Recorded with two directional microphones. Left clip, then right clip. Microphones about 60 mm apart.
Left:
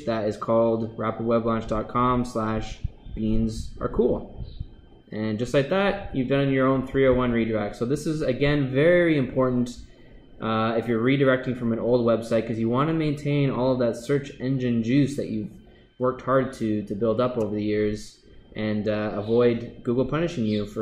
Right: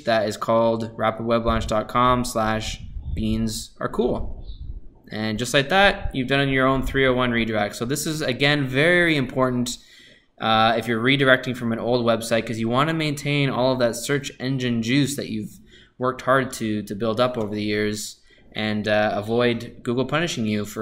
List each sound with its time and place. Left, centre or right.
0.0 s speech: right
10.4 s speech: right